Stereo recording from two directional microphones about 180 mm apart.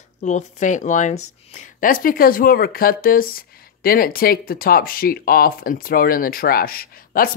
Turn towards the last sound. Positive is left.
turn(degrees=55)  # may be behind; listen again after turning